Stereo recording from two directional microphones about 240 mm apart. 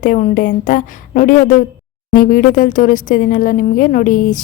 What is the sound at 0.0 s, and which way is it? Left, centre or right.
Speech, left.